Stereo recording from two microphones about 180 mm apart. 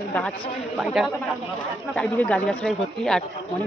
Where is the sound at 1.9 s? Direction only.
10° left (ahead or behind).